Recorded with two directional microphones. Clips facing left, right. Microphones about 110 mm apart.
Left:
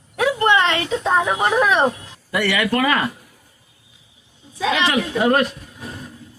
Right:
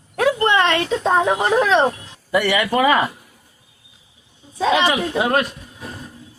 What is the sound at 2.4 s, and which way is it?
Speech, 15° right (ahead or behind).